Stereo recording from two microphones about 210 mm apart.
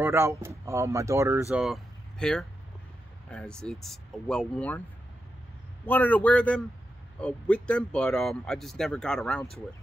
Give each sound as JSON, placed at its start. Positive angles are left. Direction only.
{"t": 0.0, "sound": "speech", "side_deg": -10}
{"t": 1.5, "sound": "speech", "side_deg": 0}
{"t": 5.9, "sound": "a man's voice", "side_deg": 10}